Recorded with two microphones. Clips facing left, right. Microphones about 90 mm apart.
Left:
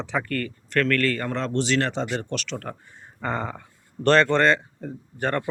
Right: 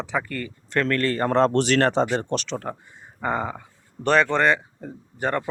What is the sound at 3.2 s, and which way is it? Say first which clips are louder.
Speech: right 3 dB; 10° right (ahead or behind).